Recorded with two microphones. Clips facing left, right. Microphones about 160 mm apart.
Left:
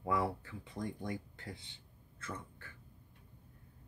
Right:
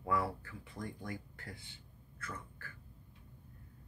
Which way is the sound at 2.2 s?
25° left (ahead or behind).